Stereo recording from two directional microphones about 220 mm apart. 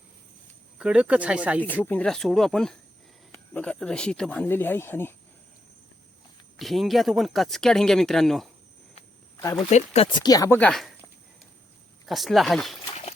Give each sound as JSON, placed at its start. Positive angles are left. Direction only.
{"t": 0.8, "sound": "speech", "side_deg": -5}
{"t": 1.6, "sound": "speech", "side_deg": 10}
{"t": 6.6, "sound": "speech", "side_deg": 0}
{"t": 9.6, "sound": "speech", "side_deg": 30}
{"t": 12.0, "sound": "speech", "side_deg": 0}